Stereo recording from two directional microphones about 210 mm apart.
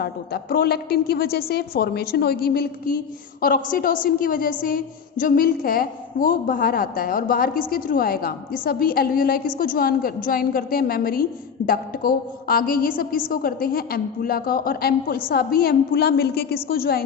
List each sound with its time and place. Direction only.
0.0 s a woman's voice: 45° left (ahead or behind)